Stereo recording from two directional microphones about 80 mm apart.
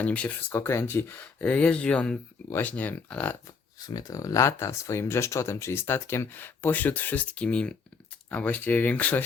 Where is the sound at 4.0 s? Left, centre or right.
Left.